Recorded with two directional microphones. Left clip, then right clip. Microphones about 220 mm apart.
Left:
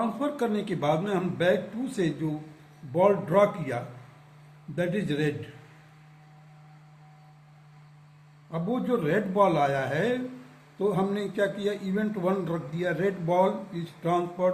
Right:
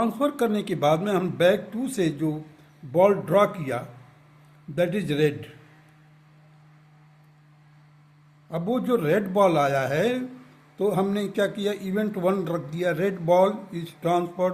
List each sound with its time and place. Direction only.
0.0 s a man's voice: 55° right (ahead or behind)
8.4 s a man's voice: 55° right (ahead or behind)